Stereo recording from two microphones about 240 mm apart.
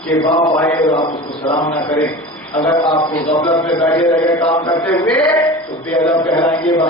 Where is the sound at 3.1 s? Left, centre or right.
Centre.